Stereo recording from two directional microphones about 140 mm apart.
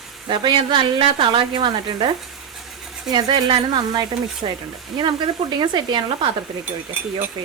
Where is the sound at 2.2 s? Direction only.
Centre (ahead or behind).